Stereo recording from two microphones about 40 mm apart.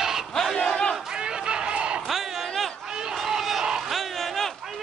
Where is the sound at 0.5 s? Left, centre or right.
Centre.